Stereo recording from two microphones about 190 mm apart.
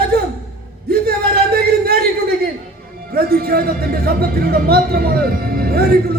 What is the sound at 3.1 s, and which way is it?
A man's voice, 55° right (ahead or behind).